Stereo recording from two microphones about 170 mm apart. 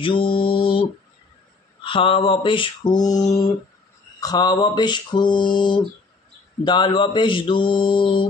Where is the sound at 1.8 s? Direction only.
30° left (ahead or behind).